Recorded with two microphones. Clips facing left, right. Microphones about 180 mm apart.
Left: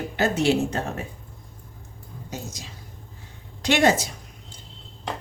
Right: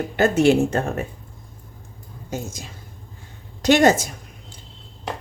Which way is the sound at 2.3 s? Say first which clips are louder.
Right 6 dB; 50° right (ahead or behind).